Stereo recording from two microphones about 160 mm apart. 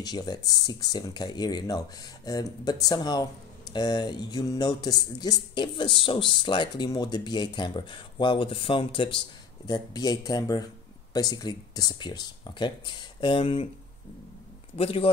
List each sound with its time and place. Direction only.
0.0 s speech: 25° left (ahead or behind)
14.8 s speech: 35° left (ahead or behind)